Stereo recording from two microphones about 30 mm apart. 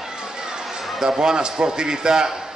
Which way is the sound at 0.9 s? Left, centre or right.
Centre.